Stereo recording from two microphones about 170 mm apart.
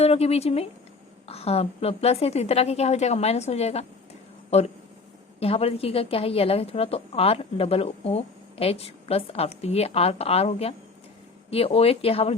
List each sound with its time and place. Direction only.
0.0 s a woman's voice: 35° left (ahead or behind)